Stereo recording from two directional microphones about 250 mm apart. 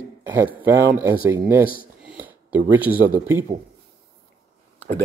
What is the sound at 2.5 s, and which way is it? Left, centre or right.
Speech, centre.